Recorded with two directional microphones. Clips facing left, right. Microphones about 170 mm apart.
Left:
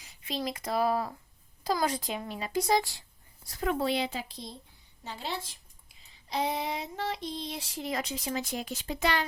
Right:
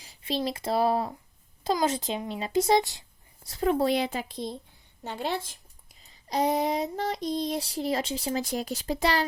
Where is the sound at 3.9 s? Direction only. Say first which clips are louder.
Right 4 dB; 50° right (ahead or behind).